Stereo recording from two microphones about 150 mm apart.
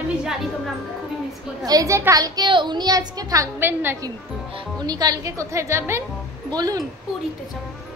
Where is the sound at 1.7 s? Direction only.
20° right (ahead or behind).